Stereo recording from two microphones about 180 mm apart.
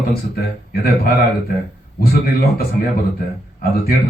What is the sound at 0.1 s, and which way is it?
Speech, 60° left (ahead or behind).